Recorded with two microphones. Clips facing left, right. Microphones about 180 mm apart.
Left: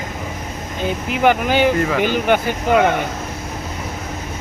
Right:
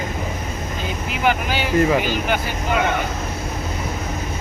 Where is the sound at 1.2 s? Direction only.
50° left (ahead or behind).